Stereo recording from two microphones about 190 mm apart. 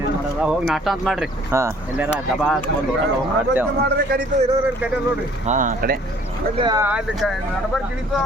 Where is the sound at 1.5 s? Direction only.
15° right (ahead or behind).